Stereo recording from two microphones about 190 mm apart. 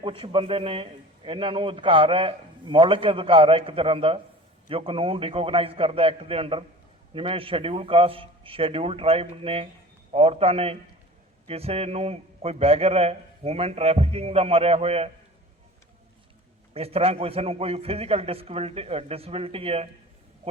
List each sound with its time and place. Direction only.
0.0 s a man's voice: 25° right (ahead or behind)
16.7 s a man's voice: 30° right (ahead or behind)